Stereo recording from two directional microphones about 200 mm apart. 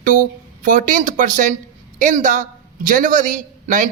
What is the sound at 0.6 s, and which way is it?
A man's voice, 40° right (ahead or behind).